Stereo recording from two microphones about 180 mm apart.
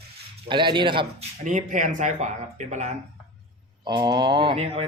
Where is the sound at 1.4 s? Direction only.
45° right (ahead or behind).